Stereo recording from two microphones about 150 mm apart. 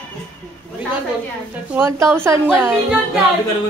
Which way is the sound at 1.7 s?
15° right (ahead or behind).